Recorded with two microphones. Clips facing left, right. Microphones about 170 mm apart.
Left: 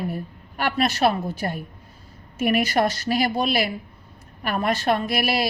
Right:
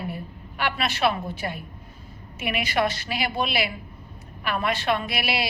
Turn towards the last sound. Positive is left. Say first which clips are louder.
# left 4 dB
turn(degrees=45)  # may be behind; listen again after turning